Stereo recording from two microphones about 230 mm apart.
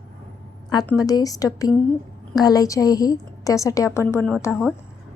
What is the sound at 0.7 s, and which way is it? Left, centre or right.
A woman's voice, centre.